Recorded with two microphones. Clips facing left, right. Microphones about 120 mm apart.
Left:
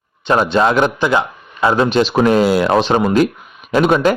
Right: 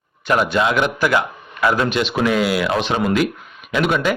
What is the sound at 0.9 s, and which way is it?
Speech, 25° left (ahead or behind).